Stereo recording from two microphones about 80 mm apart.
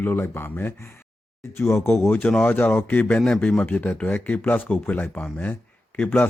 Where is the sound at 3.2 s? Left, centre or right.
Centre.